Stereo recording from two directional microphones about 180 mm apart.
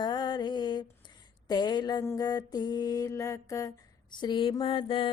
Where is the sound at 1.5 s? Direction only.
25° left (ahead or behind).